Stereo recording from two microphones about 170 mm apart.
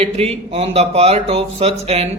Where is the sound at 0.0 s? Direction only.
35° right (ahead or behind).